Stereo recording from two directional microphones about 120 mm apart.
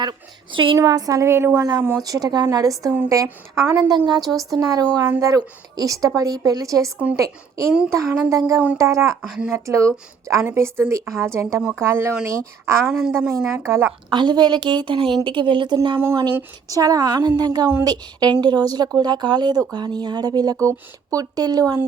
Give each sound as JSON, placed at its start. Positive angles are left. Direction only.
{"t": 0.0, "sound": "speech", "side_deg": -40}
{"t": 0.8, "sound": "a woman's voice", "side_deg": -30}
{"t": 2.0, "sound": "a woman's voice", "side_deg": -30}
{"t": 9.2, "sound": "speech", "side_deg": -5}
{"t": 9.5, "sound": "a woman's voice", "side_deg": -25}
{"t": 12.9, "sound": "a woman's voice", "side_deg": -5}
{"t": 13.1, "sound": "a woman's voice", "side_deg": -20}
{"t": 14.1, "sound": "speech", "side_deg": -40}
{"t": 16.0, "sound": "a woman's voice", "side_deg": -20}